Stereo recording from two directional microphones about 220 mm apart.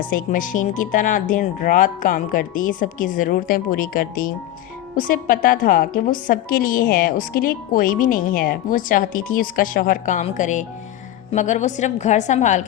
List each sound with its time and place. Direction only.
0.0 s a woman's voice: 40° left (ahead or behind)